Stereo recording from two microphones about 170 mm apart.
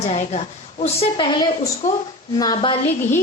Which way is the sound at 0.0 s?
40° left (ahead or behind).